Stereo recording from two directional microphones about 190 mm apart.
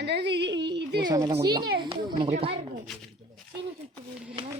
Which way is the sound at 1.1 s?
20° right (ahead or behind).